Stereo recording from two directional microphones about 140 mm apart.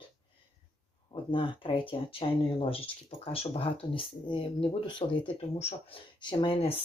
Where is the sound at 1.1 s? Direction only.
35° left (ahead or behind).